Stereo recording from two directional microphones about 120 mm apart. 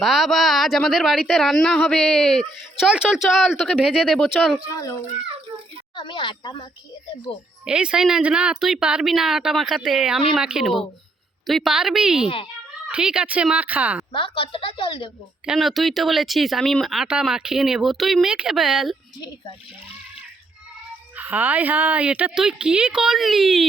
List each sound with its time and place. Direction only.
0.0 s speech: centre (ahead or behind)
2.9 s speech: 5° right (ahead or behind)
4.7 s a child's voice: 25° left (ahead or behind)
6.0 s speech: 40° left (ahead or behind)
7.6 s a woman's voice: 5° right (ahead or behind)
14.1 s a woman's voice: 45° left (ahead or behind)
15.4 s speech: centre (ahead or behind)
21.2 s a woman's voice: 15° right (ahead or behind)